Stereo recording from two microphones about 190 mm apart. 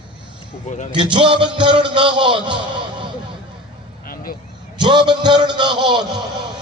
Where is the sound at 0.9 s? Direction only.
25° right (ahead or behind).